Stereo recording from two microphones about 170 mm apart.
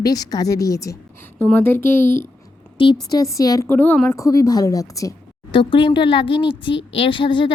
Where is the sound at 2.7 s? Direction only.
25° left (ahead or behind).